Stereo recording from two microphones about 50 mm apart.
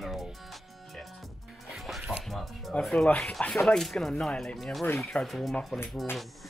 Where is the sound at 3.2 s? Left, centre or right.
Centre.